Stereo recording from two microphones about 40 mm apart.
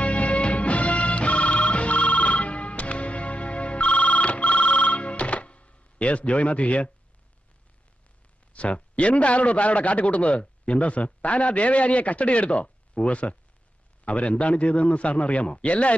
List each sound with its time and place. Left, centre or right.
0.0 s music: left
8.5 s a man's voice: left